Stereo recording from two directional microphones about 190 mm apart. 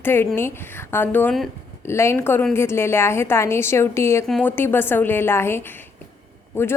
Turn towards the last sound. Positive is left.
turn(degrees=10)  # may be behind; listen again after turning